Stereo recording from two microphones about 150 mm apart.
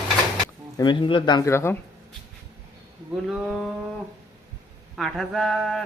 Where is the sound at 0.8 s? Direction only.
30° left (ahead or behind).